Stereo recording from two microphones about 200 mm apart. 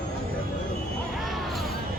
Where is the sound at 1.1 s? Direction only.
Centre (ahead or behind).